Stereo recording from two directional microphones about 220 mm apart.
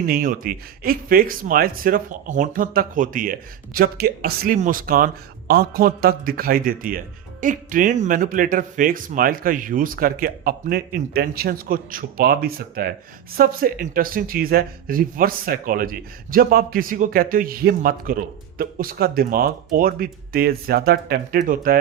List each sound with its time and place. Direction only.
0.0 s speech: 40° right (ahead or behind)